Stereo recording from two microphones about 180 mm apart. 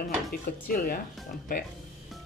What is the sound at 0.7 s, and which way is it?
Speech, 50° left (ahead or behind).